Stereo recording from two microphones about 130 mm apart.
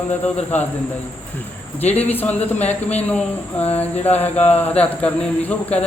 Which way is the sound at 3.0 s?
10° left (ahead or behind).